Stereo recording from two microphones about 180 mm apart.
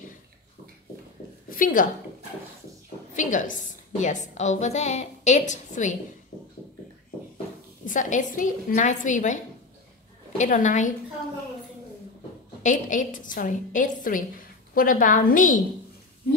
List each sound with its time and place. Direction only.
1.5 s a woman's voice: 50° left (ahead or behind)
3.2 s a woman's voice: 45° left (ahead or behind)
7.8 s a woman's voice: 45° left (ahead or behind)
12.6 s a woman's voice: 45° left (ahead or behind)